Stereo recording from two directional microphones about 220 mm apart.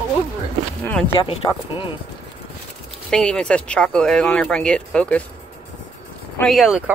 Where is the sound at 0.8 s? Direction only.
10° left (ahead or behind).